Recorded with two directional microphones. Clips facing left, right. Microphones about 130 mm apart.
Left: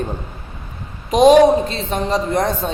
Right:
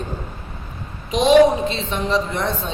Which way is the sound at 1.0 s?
45° left (ahead or behind).